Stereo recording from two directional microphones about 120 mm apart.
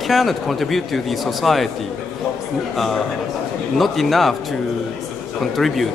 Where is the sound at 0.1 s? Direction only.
Centre (ahead or behind).